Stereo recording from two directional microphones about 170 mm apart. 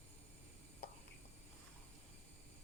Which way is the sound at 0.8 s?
70° left (ahead or behind).